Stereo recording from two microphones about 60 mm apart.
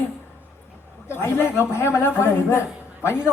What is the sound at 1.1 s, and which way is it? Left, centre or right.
A man's voice, left.